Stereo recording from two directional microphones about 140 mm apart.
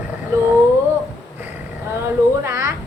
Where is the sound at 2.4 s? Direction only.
20° right (ahead or behind).